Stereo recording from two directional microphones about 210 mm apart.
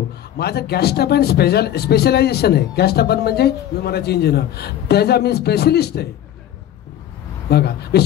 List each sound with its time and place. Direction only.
0.4 s speech: 50° left (ahead or behind)
7.4 s a man's voice: 50° left (ahead or behind)